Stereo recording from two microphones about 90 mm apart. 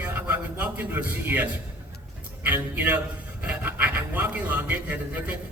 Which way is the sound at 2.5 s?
20° right (ahead or behind).